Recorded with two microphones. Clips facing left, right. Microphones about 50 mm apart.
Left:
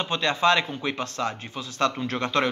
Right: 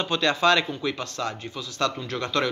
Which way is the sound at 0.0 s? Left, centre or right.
Centre.